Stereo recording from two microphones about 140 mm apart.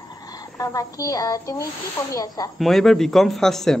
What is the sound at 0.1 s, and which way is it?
Speech, 25° left (ahead or behind).